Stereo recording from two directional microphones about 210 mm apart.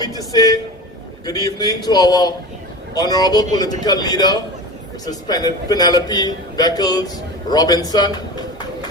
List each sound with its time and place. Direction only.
0.0 s a man's voice: 20° left (ahead or behind)